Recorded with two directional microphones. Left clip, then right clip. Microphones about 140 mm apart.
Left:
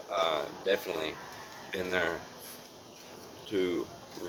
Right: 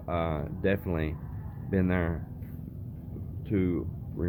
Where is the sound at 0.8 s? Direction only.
20° left (ahead or behind).